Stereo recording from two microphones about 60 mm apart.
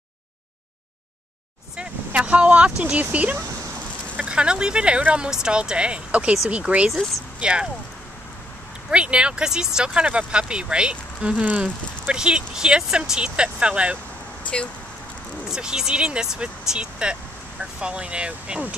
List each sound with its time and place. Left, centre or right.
1.8 s speech: right
8.9 s speech: centre
12.1 s speech: centre
15.5 s speech: centre